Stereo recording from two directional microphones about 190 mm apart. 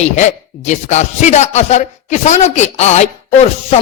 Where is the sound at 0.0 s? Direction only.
35° left (ahead or behind).